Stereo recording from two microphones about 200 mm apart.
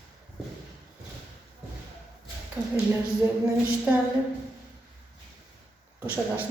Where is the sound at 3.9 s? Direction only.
5° right (ahead or behind).